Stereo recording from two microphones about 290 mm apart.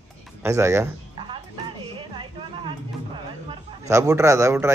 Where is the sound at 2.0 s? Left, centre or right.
Centre.